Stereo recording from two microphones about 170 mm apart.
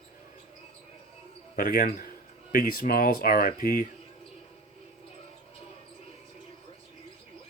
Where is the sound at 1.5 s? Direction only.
55° left (ahead or behind).